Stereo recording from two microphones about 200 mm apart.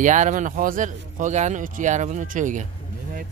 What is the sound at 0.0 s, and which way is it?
Speech, 40° right (ahead or behind).